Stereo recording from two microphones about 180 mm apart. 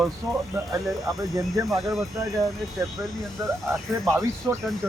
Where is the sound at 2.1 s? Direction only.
20° right (ahead or behind).